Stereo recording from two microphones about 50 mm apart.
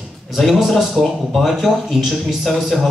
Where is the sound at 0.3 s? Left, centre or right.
Centre.